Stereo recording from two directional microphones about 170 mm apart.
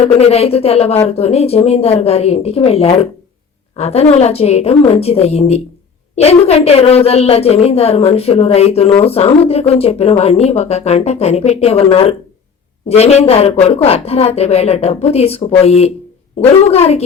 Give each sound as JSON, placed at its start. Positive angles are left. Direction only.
{"t": 0.3, "sound": "a woman's voice", "side_deg": 35}